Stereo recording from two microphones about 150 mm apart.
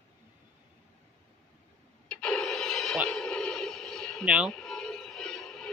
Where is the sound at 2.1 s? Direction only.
5° left (ahead or behind).